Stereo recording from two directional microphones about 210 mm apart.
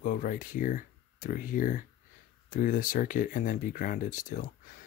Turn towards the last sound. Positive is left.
turn(degrees=40)  # may be behind; listen again after turning